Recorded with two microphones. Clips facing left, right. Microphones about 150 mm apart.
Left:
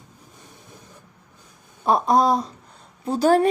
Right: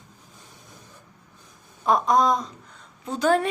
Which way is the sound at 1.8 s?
35° left (ahead or behind).